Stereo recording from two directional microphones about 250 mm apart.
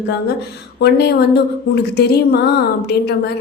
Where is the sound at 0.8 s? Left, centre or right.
Left.